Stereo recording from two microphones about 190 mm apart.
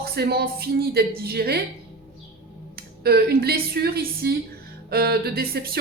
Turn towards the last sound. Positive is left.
turn(degrees=-55)  # may be behind; listen again after turning